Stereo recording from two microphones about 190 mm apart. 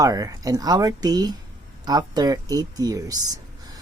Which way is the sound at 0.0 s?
20° right (ahead or behind).